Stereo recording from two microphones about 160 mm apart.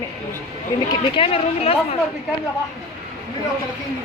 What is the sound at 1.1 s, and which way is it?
Speech, 35° left (ahead or behind).